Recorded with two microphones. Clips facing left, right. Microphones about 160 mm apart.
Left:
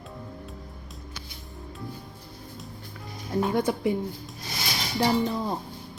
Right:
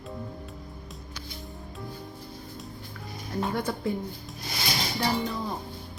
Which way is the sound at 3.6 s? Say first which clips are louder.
Left 5 dB; 20° left (ahead or behind).